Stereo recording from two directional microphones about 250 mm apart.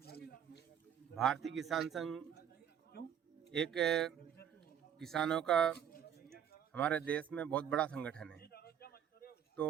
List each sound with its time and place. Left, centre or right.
0.0 s a sound: left
1.1 s a man's voice: centre
2.9 s a man's voice: left
3.5 s a man's voice: centre
6.7 s a man's voice: centre
8.4 s a sound: left